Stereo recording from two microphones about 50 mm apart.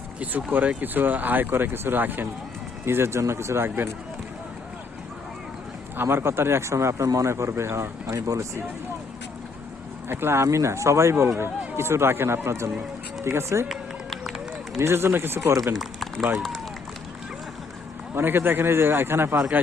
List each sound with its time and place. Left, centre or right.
0.8 s speech: right
2.8 s speech: right
6.0 s speech: right
10.1 s a man's voice: right
10.4 s speech: right
13.7 s run: centre
14.8 s a man's voice: right
15.4 s speech: right
15.7 s a sound: centre
18.1 s a man's voice: right